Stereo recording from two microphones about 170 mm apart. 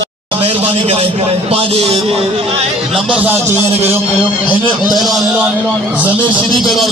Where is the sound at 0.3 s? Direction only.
35° right (ahead or behind).